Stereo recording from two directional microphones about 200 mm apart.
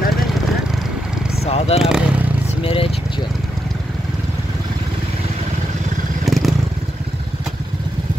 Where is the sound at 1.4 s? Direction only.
30° left (ahead or behind).